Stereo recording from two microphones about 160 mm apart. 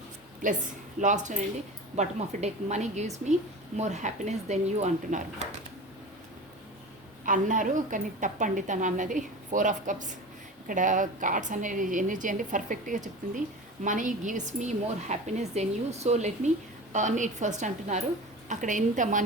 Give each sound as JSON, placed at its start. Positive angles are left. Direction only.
{"t": 0.9, "sound": "a woman's voice", "side_deg": -50}
{"t": 7.3, "sound": "a woman's voice", "side_deg": -55}